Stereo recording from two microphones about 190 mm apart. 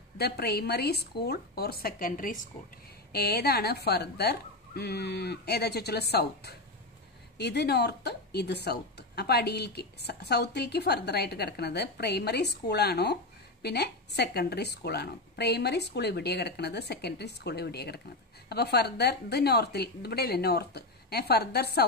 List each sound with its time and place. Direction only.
0.2 s speech: 55° left (ahead or behind)